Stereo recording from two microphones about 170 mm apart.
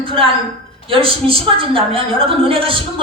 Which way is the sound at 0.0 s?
30° right (ahead or behind).